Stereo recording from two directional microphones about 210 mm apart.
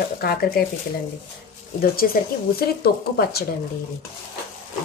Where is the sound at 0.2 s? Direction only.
45° left (ahead or behind).